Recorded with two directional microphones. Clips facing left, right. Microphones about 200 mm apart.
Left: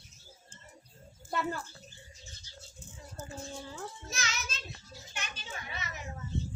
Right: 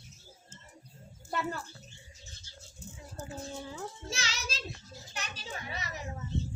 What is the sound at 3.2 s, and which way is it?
Speech, 5° right (ahead or behind).